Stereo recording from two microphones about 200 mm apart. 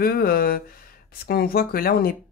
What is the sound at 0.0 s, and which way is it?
Speech, 50° left (ahead or behind).